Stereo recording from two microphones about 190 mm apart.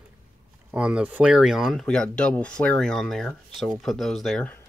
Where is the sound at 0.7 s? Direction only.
5° right (ahead or behind).